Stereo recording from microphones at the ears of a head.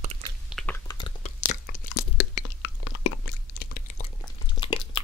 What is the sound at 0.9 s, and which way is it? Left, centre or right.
Crunch, left.